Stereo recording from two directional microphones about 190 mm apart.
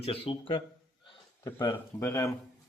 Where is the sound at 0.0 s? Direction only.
30° left (ahead or behind).